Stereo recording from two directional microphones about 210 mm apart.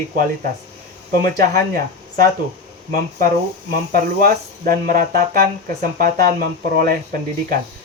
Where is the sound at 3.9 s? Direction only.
45° right (ahead or behind).